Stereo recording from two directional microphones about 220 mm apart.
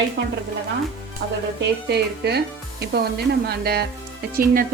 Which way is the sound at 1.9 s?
50° right (ahead or behind).